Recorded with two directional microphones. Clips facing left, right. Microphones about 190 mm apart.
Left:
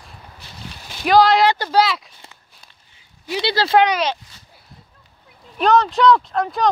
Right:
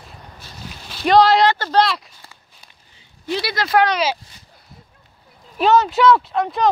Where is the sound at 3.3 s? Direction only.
25° left (ahead or behind).